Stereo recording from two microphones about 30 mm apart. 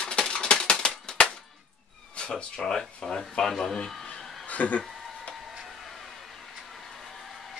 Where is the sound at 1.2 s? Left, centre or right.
Left.